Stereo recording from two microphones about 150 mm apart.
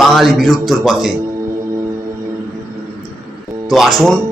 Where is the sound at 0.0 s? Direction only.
Centre (ahead or behind).